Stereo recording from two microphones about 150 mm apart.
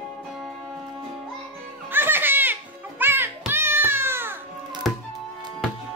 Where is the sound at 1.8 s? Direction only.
15° right (ahead or behind).